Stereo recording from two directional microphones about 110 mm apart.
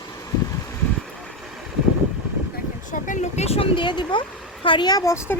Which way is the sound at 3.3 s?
75° left (ahead or behind).